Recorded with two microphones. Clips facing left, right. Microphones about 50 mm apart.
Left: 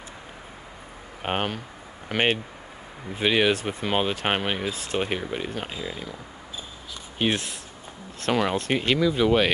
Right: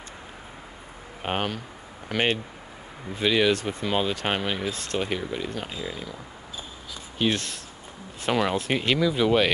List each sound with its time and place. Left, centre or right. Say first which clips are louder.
1.2 s speech: left 1 dB; centre
4.9 s speech: left 1 dB; left
7.2 s speech: even; centre
8.2 s speech: even; centre